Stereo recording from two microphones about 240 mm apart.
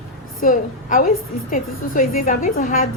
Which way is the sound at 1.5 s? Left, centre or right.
Left.